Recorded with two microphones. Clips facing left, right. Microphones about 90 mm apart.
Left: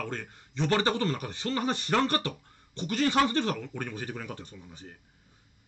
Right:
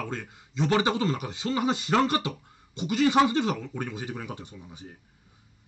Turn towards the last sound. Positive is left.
turn(degrees=-15)  # may be behind; listen again after turning